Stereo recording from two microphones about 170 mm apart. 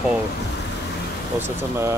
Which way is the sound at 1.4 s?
15° right (ahead or behind).